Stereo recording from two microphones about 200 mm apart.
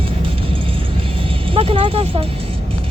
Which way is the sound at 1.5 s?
25° right (ahead or behind).